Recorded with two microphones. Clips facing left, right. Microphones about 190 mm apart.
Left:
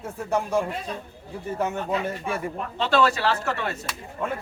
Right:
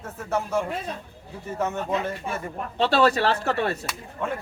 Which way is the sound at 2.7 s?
35° right (ahead or behind).